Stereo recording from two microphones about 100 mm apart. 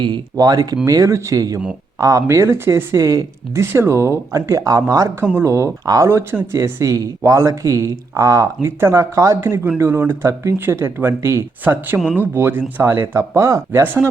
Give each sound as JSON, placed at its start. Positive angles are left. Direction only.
{"t": 0.3, "sound": "speech", "side_deg": -40}